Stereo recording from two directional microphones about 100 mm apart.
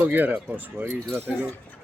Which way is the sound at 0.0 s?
20° right (ahead or behind).